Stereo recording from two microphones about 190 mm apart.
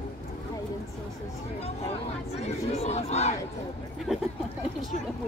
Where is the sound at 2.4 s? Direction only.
35° left (ahead or behind).